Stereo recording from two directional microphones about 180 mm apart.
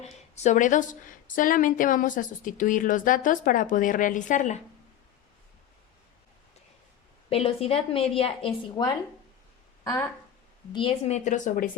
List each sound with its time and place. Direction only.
0.0 s a woman's voice: 40° left (ahead or behind)
7.3 s a woman's voice: 30° left (ahead or behind)
10.7 s a woman's voice: 30° left (ahead or behind); by 11.8 s 50° left (ahead or behind)